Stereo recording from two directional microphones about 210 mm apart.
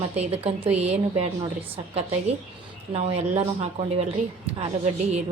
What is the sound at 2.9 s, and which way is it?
Speech, 30° right (ahead or behind).